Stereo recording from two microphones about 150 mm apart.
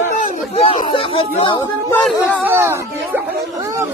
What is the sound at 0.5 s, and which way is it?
Speech, 40° left (ahead or behind).